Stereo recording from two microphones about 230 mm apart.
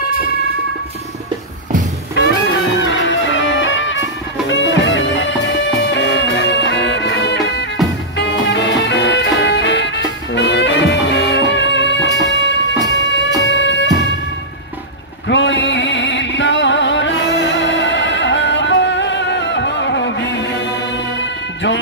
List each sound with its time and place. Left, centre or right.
2.8 s music: left
15.2 s music: left